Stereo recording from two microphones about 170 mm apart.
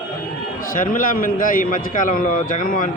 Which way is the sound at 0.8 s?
55° left (ahead or behind).